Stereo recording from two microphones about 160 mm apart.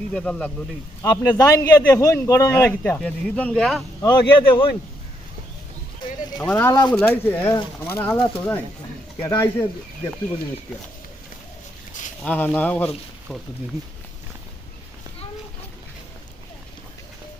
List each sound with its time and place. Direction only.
0.1 s speech: 5° left (ahead or behind)
1.0 s a man's voice: 20° left (ahead or behind); by 3.8 s centre (ahead or behind)
4.0 s a man's voice: 20° left (ahead or behind)
6.0 s a sound: 30° left (ahead or behind)
6.5 s speech: 15° left (ahead or behind)
12.2 s speech: 10° left (ahead or behind)